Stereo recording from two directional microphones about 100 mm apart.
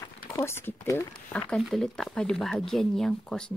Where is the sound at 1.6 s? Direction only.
Centre (ahead or behind).